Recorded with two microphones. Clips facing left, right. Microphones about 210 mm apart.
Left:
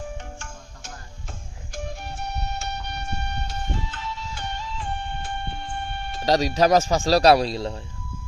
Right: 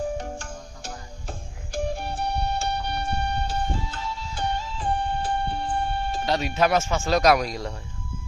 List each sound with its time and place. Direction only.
0.2 s music: 35° right (ahead or behind)
6.2 s speech: 35° left (ahead or behind)